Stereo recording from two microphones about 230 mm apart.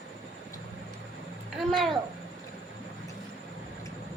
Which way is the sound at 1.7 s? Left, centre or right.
Centre.